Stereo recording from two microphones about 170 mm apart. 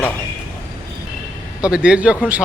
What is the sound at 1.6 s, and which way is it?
Speech, 5° right (ahead or behind).